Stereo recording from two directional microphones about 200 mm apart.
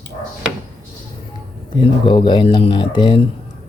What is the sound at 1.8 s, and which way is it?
Speech, 25° left (ahead or behind).